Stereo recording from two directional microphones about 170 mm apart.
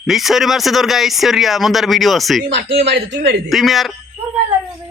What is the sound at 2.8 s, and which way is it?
Speech, 85° right.